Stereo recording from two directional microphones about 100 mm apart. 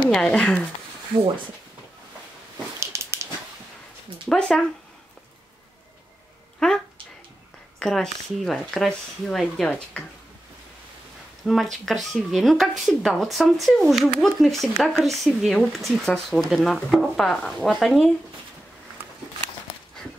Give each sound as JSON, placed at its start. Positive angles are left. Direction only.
{"t": 0.1, "sound": "speech", "side_deg": 10}
{"t": 2.8, "sound": "a sound", "side_deg": -25}
{"t": 4.3, "sound": "speech", "side_deg": 5}
{"t": 6.6, "sound": "speech", "side_deg": 5}
{"t": 7.8, "sound": "speech", "side_deg": 5}
{"t": 11.4, "sound": "speech", "side_deg": 0}